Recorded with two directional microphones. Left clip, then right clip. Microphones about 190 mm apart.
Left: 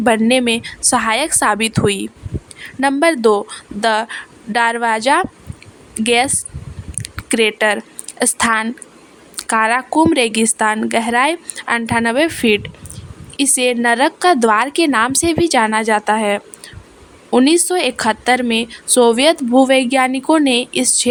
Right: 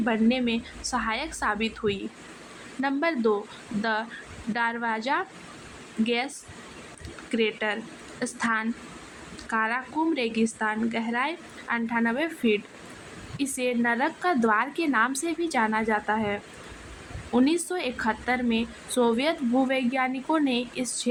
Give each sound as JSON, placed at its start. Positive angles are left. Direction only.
{"t": 0.0, "sound": "a woman's voice", "side_deg": 60}
{"t": 7.0, "sound": "a sound", "side_deg": 65}
{"t": 8.2, "sound": "a woman's voice", "side_deg": 65}